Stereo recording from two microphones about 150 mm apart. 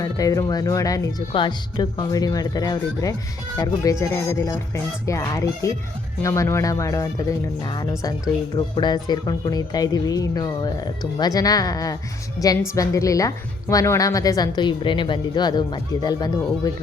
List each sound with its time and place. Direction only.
0.0 s speech: 25° left (ahead or behind)